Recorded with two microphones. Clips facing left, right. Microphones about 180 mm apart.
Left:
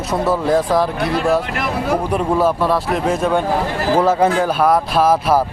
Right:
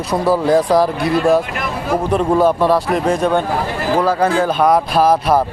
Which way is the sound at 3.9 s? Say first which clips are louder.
Left 1 dB; 25° left (ahead or behind).